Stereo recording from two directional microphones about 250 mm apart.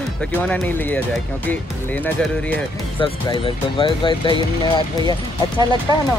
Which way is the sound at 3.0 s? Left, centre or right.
Left.